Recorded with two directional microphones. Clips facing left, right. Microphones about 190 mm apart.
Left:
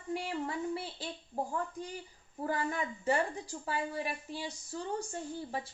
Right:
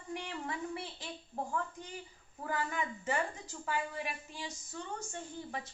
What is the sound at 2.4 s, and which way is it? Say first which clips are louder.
Speech: left 3 dB; 35° left (ahead or behind).